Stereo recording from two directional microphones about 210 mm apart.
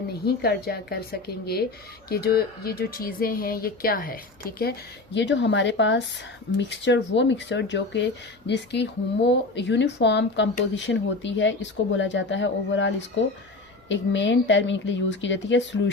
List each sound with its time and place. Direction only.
0.3 s speech: 50° left (ahead or behind)
2.0 s speech: 50° left (ahead or behind)
5.1 s speech: 60° left (ahead or behind)